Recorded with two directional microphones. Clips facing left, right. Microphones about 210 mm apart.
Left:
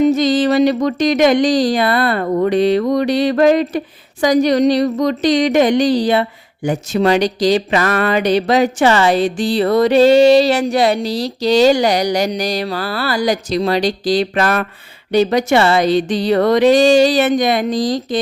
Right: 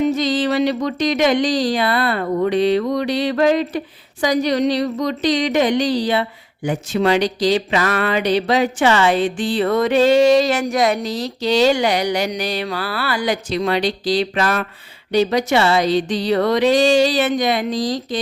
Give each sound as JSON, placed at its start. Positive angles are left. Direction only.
{"t": 0.0, "sound": "speech", "side_deg": 45}